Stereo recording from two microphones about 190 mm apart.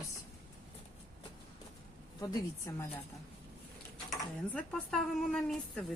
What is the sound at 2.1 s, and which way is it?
Speech, 20° left (ahead or behind).